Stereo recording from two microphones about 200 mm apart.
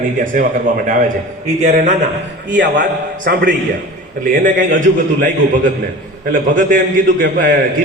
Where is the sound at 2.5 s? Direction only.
60° right (ahead or behind).